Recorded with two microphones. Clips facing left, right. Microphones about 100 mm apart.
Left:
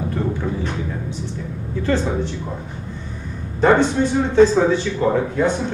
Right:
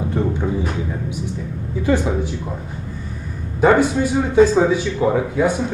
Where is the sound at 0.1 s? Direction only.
20° right (ahead or behind).